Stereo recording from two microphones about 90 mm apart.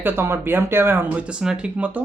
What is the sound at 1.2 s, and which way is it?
Speech, 10° right (ahead or behind).